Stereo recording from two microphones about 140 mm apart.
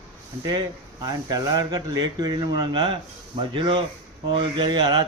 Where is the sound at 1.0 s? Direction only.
30° right (ahead or behind).